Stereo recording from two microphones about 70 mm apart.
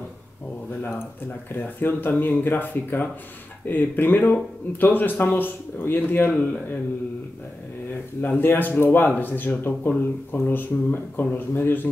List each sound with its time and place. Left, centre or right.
1.5 s speech: left
8.2 s speech: left